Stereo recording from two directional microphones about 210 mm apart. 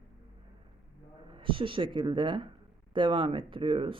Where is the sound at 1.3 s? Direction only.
25° right (ahead or behind).